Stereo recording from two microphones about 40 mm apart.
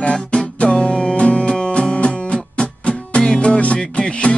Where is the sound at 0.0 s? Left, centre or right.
Left.